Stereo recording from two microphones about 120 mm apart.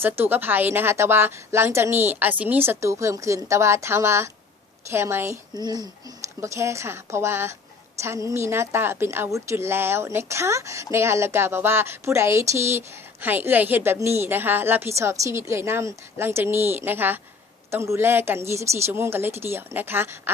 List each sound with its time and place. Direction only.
0.0 s a woman's voice: 15° right (ahead or behind)
5.5 s a woman's voice: 35° right (ahead or behind); by 20.3 s 20° right (ahead or behind)